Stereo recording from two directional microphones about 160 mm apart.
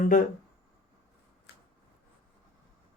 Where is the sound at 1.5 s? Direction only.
90° left.